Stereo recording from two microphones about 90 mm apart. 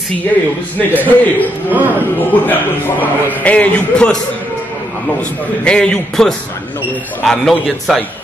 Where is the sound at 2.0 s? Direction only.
20° left (ahead or behind).